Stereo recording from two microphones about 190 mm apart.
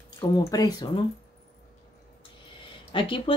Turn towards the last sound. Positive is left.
turn(degrees=25)  # may be behind; listen again after turning